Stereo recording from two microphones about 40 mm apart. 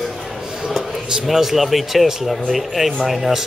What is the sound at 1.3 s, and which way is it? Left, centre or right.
Speech, centre.